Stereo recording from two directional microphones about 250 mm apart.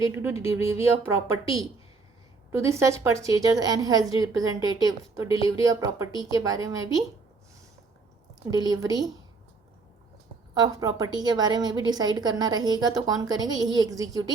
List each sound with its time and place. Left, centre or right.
0.0 s a woman's voice: centre
2.5 s a woman's voice: centre
8.5 s a woman's voice: centre
10.5 s a woman's voice: centre